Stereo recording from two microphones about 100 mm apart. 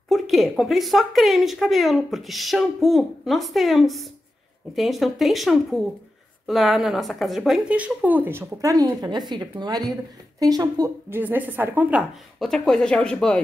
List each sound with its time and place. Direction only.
0.1 s a woman's voice: centre (ahead or behind); by 8.5 s 25° right (ahead or behind)
8.5 s a woman's voice: 35° right (ahead or behind)
11.1 s a woman's voice: 20° right (ahead or behind)
12.4 s speech: 5° left (ahead or behind)